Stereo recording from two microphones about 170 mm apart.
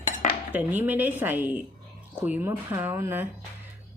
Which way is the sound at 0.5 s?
10° right (ahead or behind).